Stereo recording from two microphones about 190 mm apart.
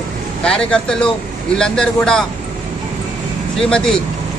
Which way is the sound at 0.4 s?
5° left (ahead or behind).